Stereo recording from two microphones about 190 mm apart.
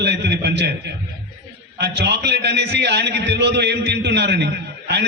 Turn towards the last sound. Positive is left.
turn(degrees=-65)  # may be behind; listen again after turning